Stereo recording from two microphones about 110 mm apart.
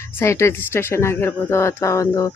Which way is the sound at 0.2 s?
25° left (ahead or behind).